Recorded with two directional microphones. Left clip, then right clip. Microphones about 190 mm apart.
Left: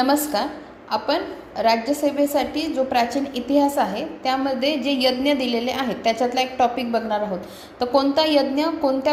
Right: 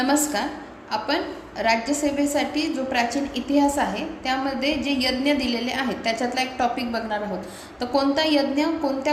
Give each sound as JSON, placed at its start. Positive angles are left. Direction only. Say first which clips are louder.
{"t": 0.0, "sound": "a woman's voice", "louder": "left 2 dB", "side_deg": 30}